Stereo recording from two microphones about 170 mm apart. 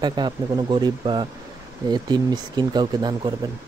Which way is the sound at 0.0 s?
25° right (ahead or behind).